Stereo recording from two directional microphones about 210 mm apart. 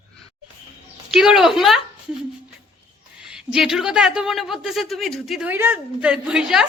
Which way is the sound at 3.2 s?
5° right (ahead or behind).